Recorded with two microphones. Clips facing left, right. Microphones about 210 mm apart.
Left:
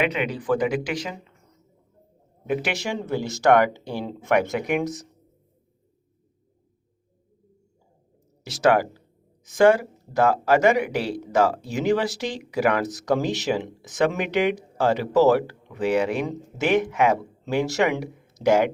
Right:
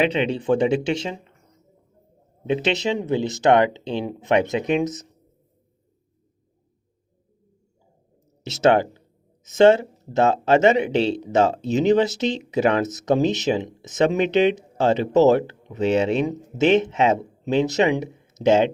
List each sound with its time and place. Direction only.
0.0 s speech: 30° right (ahead or behind)
2.5 s speech: 25° right (ahead or behind)
8.4 s speech: 25° right (ahead or behind)